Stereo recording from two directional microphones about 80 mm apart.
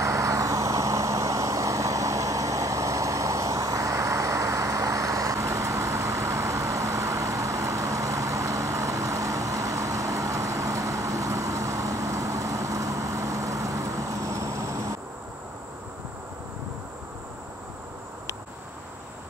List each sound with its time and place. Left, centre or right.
0.0 s vehicle: right